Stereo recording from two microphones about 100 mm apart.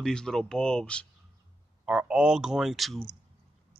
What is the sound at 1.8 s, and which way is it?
Speech, 10° right (ahead or behind).